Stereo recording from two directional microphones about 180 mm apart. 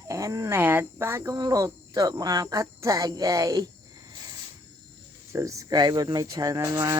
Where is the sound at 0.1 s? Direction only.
20° right (ahead or behind).